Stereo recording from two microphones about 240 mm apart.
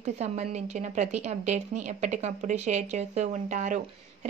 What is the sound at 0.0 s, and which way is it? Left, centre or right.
A woman's voice, right.